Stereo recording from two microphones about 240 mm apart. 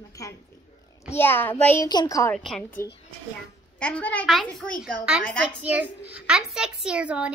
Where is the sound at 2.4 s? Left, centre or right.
Centre.